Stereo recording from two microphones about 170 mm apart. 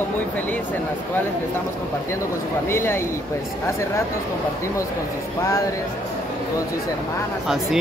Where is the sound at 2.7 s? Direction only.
15° left (ahead or behind).